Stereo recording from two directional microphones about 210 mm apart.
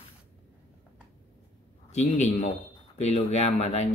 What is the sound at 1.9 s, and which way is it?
Speech, 35° left (ahead or behind).